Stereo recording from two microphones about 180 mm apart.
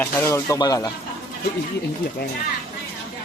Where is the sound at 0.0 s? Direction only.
15° left (ahead or behind).